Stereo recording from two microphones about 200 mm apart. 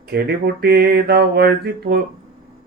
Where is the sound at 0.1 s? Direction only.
55° right (ahead or behind).